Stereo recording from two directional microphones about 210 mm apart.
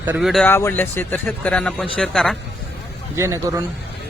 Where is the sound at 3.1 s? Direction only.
15° right (ahead or behind).